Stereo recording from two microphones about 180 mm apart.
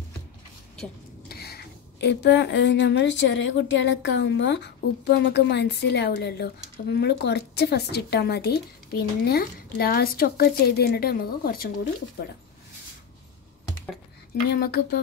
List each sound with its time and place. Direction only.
1.3 s speech: 60° left (ahead or behind)
14.5 s speech: 60° left (ahead or behind)